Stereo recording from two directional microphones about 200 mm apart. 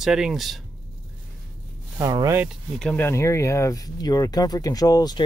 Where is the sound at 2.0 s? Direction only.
15° right (ahead or behind).